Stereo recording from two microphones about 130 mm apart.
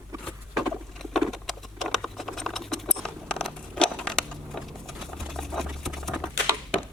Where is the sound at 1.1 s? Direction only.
Centre (ahead or behind).